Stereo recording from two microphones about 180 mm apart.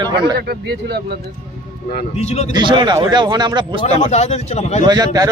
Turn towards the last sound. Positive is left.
turn(degrees=-20)  # may be behind; listen again after turning